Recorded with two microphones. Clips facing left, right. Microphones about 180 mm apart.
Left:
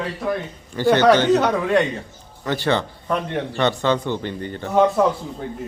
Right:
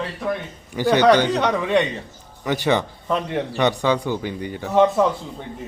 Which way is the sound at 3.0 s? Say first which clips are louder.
Even; centre (ahead or behind).